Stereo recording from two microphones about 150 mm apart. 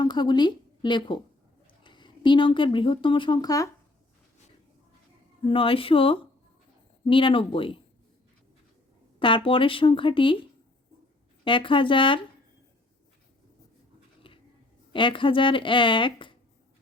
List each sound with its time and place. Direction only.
0.0 s a woman's voice: 30° left (ahead or behind)
5.5 s a woman's voice: 35° left (ahead or behind)
9.1 s a woman's voice: 35° left (ahead or behind)
11.4 s a woman's voice: 35° left (ahead or behind)
14.3 s a sound: 35° left (ahead or behind)
14.9 s a woman's voice: 35° left (ahead or behind)